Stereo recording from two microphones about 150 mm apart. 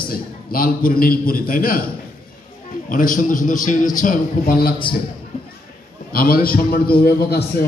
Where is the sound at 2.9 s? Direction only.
65° left (ahead or behind).